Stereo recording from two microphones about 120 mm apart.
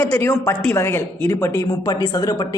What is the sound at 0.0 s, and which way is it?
A woman's voice, 20° left (ahead or behind).